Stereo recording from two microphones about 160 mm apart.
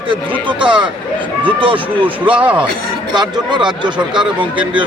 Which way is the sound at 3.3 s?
30° right (ahead or behind).